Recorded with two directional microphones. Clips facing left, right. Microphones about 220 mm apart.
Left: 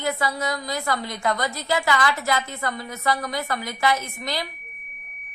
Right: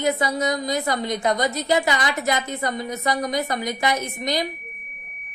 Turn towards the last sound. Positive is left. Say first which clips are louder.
# right 5 dB
turn(degrees=-20)  # may be behind; listen again after turning